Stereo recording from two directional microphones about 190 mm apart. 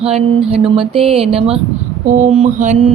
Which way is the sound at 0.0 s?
30° right (ahead or behind).